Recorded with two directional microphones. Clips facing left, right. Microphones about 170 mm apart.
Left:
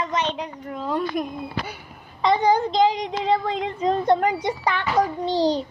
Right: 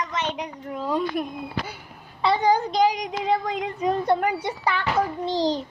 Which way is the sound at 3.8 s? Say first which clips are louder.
Left 2 dB; 10° right (ahead or behind).